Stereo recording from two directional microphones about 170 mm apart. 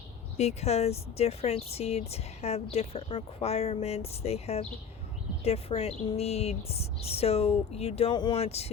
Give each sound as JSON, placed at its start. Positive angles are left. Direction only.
{"t": 0.3, "sound": "speech", "side_deg": 40}